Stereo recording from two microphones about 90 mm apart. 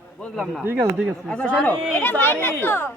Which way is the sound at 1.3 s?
15° left (ahead or behind).